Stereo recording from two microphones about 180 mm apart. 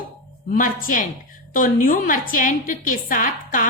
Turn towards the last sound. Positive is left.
turn(degrees=45)  # may be behind; listen again after turning